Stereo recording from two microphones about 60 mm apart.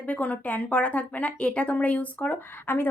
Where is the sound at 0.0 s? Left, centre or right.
Left.